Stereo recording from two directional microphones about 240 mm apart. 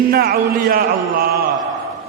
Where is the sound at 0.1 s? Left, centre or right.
Right.